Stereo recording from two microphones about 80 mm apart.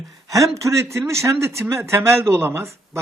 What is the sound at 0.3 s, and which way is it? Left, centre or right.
Speech, right.